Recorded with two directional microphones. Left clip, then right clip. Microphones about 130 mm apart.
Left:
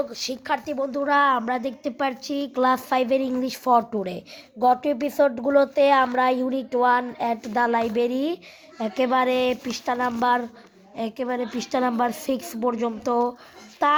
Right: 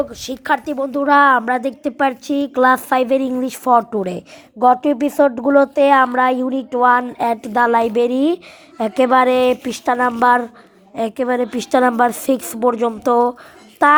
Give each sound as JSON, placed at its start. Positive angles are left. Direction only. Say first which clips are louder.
{"t": 0.1, "sound": "a woman's voice", "louder": "right 2 dB", "side_deg": -15}
{"t": 0.4, "sound": "a woman's voice", "louder": "right 8 dB", "side_deg": -30}
{"t": 7.2, "sound": "a woman's voice", "louder": "right 7 dB", "side_deg": -30}